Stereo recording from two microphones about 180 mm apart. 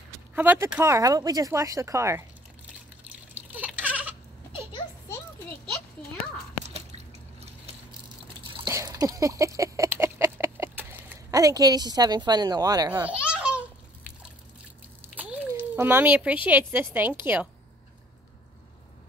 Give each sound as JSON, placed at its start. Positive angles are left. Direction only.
{"t": 0.3, "sound": "speech", "side_deg": -10}
{"t": 3.0, "sound": "water", "side_deg": -10}
{"t": 6.7, "sound": "water", "side_deg": -35}
{"t": 8.6, "sound": "a sound", "side_deg": -20}
{"t": 13.0, "sound": "baby laughter", "side_deg": -5}
{"t": 15.1, "sound": "a sound", "side_deg": -10}
{"t": 16.4, "sound": "speech", "side_deg": -10}